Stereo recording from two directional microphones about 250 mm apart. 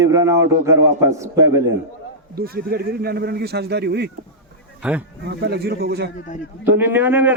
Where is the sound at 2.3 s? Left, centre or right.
Right.